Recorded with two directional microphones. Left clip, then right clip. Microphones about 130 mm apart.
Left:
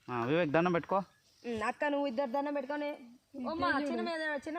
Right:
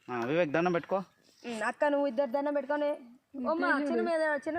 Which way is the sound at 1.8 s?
65° right (ahead or behind).